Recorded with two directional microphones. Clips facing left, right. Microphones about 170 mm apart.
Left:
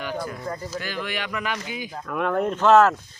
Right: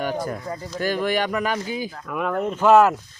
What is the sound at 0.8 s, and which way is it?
Speech, 45° right (ahead or behind).